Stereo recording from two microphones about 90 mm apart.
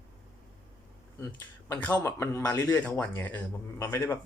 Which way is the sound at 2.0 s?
30° left (ahead or behind).